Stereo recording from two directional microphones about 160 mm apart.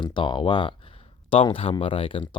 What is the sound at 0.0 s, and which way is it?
Speech, 30° left (ahead or behind).